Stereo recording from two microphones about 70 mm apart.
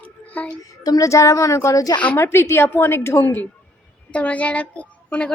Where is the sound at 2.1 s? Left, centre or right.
Left.